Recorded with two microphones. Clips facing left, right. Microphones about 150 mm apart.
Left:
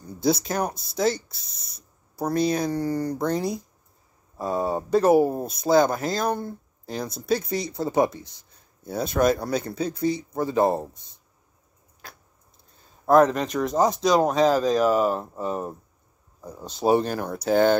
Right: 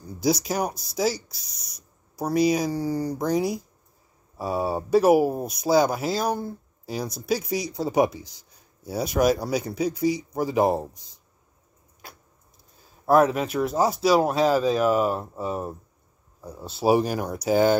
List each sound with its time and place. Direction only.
0.0 s speech: 5° right (ahead or behind)
1.6 s a sound: 30° left (ahead or behind)
2.1 s speech: 10° right (ahead or behind)
13.0 s speech: 5° right (ahead or behind)